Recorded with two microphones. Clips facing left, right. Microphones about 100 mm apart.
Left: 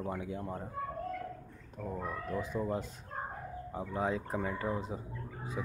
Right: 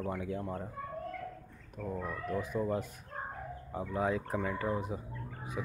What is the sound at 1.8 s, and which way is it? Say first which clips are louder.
Speech: right 1 dB; 10° left (ahead or behind).